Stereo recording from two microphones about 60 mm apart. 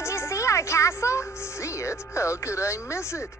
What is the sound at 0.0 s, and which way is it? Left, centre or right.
Music, left.